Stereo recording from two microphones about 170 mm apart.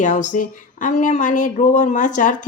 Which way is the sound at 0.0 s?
45° left (ahead or behind).